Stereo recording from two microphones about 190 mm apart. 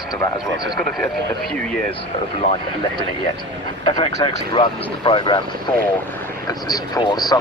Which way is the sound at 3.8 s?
25° left (ahead or behind).